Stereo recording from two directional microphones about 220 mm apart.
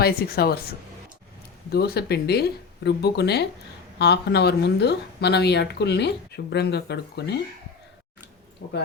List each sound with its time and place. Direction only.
0.0 s speech: 45° left (ahead or behind)
1.7 s speech: 45° left (ahead or behind)
8.6 s speech: 60° left (ahead or behind)